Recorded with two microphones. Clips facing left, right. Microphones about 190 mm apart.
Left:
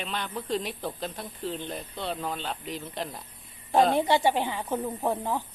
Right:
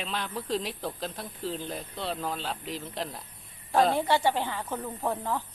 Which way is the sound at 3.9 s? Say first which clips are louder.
Left 2 dB; 15° left (ahead or behind).